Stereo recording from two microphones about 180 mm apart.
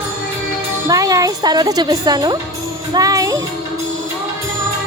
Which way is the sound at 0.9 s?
20° right (ahead or behind).